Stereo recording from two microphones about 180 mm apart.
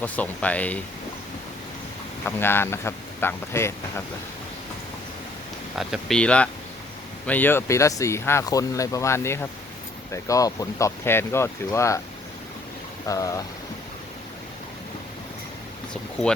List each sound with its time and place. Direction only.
0.0 s speech: 10° left (ahead or behind)
2.2 s speech: 10° left (ahead or behind)
5.7 s speech: centre (ahead or behind); by 11.9 s 15° left (ahead or behind)
13.1 s speech: 20° left (ahead or behind)